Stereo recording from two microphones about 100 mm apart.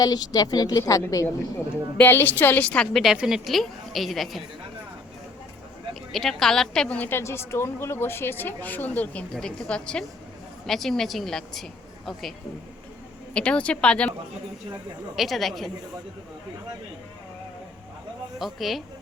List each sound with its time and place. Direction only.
0.0 s a woman's voice: 40° left (ahead or behind)
2.0 s a woman's voice: 20° left (ahead or behind); by 4.4 s centre (ahead or behind)
5.9 s a woman's voice: centre (ahead or behind)
13.3 s a woman's voice: 10° left (ahead or behind)
15.1 s a woman's voice: centre (ahead or behind)
18.3 s a woman's voice: centre (ahead or behind)